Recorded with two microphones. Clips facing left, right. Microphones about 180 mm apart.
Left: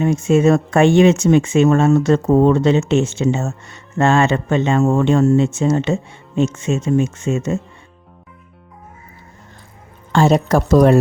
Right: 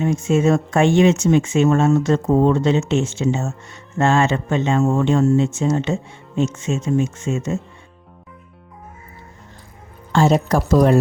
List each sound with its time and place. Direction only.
0.0 s speech: 65° left (ahead or behind)
10.1 s speech: 70° left (ahead or behind)